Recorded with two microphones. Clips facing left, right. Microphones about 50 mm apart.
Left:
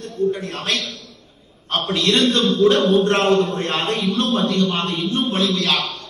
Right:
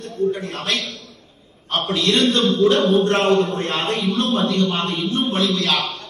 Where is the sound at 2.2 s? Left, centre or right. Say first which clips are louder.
Even; right.